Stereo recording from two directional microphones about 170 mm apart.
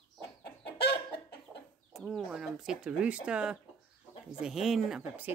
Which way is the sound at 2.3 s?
5° right (ahead or behind).